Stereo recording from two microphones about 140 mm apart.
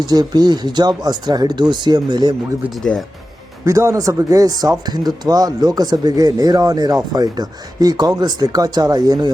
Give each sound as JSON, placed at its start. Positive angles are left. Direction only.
{"t": 0.0, "sound": "speech", "side_deg": -30}
{"t": 3.7, "sound": "speech", "side_deg": -20}